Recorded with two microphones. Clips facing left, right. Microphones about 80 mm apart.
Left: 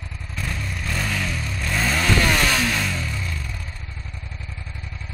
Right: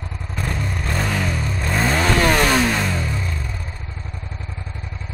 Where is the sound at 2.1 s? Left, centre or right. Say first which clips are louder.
Right 4 dB; right.